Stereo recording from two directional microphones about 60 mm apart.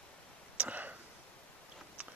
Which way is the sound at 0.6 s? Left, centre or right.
Right.